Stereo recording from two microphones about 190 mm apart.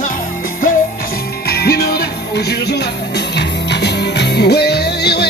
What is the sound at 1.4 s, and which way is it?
Music, 55° left (ahead or behind).